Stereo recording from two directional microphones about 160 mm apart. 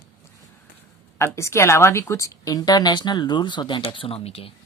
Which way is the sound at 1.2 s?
15° left (ahead or behind).